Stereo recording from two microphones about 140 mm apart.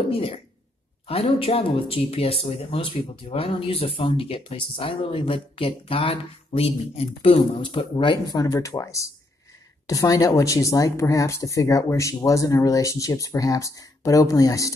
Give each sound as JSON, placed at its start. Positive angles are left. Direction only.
{"t": 0.1, "sound": "speech", "side_deg": 40}